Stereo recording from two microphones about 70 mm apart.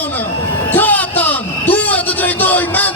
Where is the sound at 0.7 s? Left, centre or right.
Left.